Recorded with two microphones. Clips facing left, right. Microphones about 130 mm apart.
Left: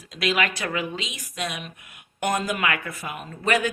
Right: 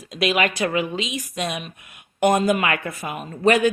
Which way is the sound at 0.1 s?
20° right (ahead or behind).